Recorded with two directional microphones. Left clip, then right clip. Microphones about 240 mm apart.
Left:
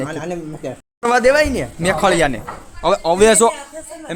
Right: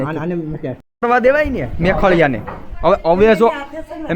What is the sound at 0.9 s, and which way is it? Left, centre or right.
A man's voice, centre.